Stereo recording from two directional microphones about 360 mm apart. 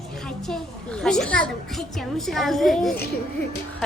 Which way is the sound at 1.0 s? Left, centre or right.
Centre.